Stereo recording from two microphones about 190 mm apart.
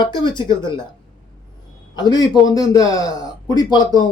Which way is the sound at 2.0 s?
20° left (ahead or behind).